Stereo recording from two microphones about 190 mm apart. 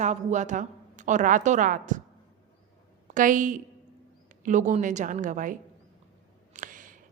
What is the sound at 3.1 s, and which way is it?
A woman's voice, 45° right (ahead or behind).